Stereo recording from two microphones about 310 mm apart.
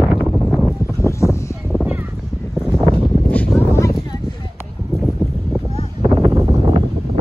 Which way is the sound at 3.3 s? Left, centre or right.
Centre.